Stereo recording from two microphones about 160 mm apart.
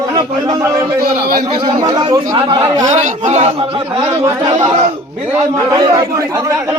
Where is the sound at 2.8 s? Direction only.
50° right (ahead or behind).